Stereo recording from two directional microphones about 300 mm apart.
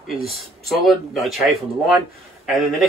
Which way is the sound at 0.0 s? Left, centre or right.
Centre.